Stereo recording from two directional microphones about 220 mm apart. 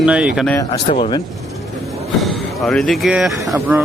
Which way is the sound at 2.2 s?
Centre (ahead or behind).